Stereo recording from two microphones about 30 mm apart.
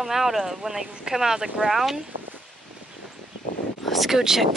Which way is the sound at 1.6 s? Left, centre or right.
Centre.